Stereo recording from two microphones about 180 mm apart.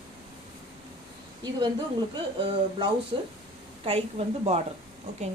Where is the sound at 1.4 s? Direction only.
25° right (ahead or behind).